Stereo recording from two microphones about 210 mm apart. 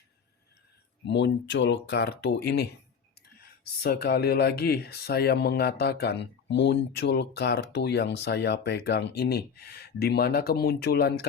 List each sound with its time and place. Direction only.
1.0 s speech: 55° left (ahead or behind)